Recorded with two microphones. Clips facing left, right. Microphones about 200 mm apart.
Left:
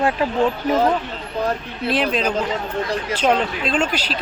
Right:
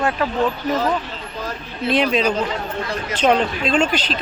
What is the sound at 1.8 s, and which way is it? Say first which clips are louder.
Speech: right 2 dB; 5° left (ahead or behind).